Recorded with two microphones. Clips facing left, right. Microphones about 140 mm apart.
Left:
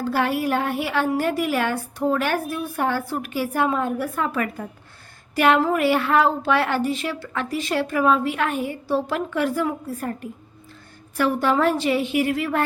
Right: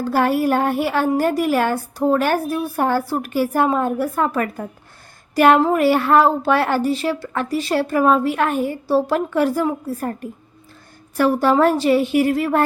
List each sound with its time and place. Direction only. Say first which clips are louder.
0.0 s a woman's voice: right 5 dB; 45° right (ahead or behind)
5.3 s a sound: right 5 dB; 40° right (ahead or behind)
5.7 s a woman's voice: right 4 dB; 40° right (ahead or behind)